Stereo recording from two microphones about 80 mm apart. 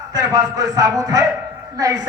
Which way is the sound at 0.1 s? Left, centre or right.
Right.